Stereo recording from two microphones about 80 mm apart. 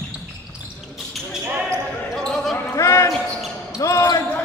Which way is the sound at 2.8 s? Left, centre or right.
Left.